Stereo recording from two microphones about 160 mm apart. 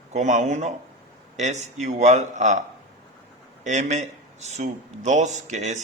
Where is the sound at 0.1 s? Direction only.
50° right (ahead or behind).